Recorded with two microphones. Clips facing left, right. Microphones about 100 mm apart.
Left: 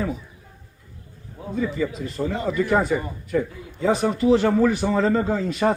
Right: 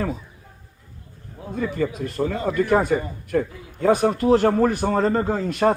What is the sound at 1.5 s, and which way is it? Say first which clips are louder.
A man's voice: even; 55° right (ahead or behind).